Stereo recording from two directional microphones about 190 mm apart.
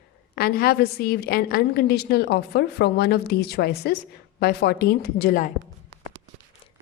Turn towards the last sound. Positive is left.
turn(degrees=50)  # may be behind; listen again after turning